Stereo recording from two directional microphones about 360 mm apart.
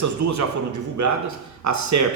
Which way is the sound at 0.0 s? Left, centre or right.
Right.